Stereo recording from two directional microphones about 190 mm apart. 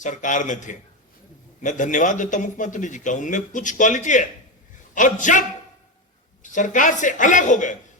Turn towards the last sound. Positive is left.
turn(degrees=40)  # may be behind; listen again after turning